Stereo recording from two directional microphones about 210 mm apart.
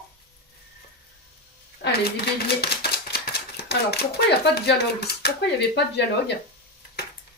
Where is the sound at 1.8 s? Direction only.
50° left (ahead or behind).